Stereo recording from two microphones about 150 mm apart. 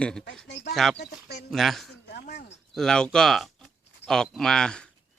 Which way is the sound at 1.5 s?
Centre (ahead or behind).